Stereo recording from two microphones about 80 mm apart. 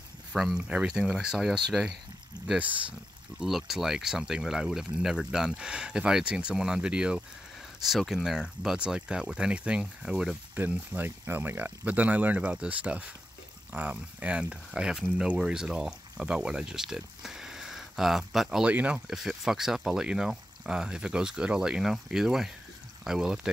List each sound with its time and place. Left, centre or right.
0.3 s speech: centre
3.3 s speech: centre
10.5 s speech: right; by 18.7 s centre
18.7 s speech: centre
19.0 s speech: centre